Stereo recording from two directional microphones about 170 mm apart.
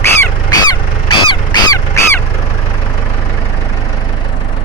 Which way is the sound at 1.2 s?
25° left (ahead or behind).